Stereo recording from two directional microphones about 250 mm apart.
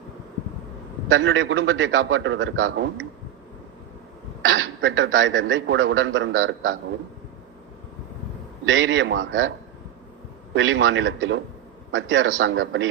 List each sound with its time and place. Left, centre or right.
1.0 s a man's voice: right
4.4 s a man's voice: right
8.6 s a man's voice: right
10.5 s a man's voice: right